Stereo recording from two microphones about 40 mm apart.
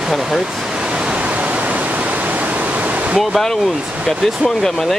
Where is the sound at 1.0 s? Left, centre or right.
Right.